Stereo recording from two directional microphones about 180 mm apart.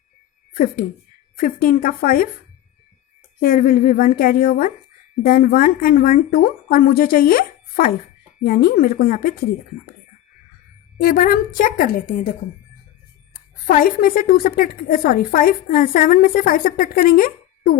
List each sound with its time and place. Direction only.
0.5 s a woman's voice: 50° left (ahead or behind)
3.4 s a woman's voice: 50° left (ahead or behind)
11.0 s a woman's voice: 55° left (ahead or behind)
13.7 s a woman's voice: 50° left (ahead or behind)